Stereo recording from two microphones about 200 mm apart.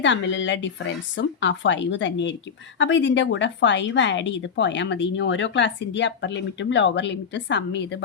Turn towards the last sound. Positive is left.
turn(degrees=60)  # may be behind; listen again after turning